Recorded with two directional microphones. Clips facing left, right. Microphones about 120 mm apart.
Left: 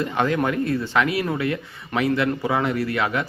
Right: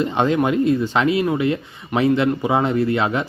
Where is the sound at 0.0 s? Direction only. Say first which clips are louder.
Right 4 dB; 20° right (ahead or behind).